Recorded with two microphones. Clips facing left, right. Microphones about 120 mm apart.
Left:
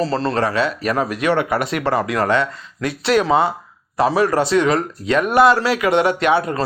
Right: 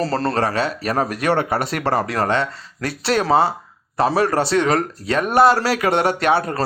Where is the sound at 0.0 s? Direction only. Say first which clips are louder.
Left 1 dB; 40° right (ahead or behind).